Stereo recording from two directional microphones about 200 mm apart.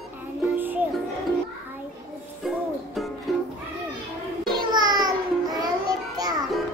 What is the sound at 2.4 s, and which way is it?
Music, centre (ahead or behind).